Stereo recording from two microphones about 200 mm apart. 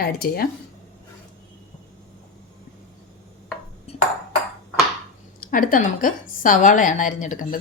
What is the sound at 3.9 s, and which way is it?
Ping, 30° left (ahead or behind).